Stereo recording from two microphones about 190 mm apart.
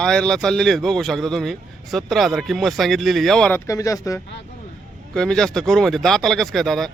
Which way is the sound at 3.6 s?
15° left (ahead or behind).